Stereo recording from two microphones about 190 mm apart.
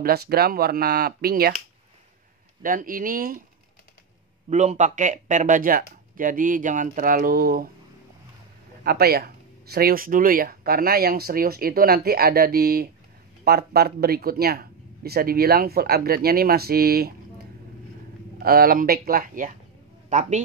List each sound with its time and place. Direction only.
0.0 s speech: 55° right (ahead or behind)
2.6 s speech: 45° right (ahead or behind)
4.5 s speech: 40° right (ahead or behind)
8.8 s speech: 55° right (ahead or behind)
18.4 s a man's voice: 50° right (ahead or behind)